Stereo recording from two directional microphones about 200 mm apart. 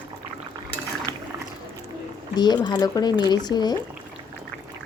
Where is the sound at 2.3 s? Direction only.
20° left (ahead or behind).